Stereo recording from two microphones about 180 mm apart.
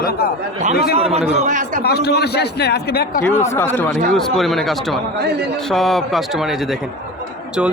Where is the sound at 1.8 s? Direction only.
65° left (ahead or behind).